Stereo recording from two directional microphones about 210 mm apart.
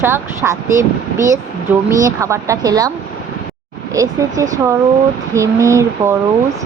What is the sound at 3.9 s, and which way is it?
Speech, 15° right (ahead or behind).